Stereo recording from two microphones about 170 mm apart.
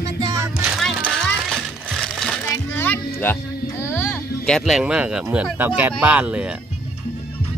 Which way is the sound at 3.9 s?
10° left (ahead or behind).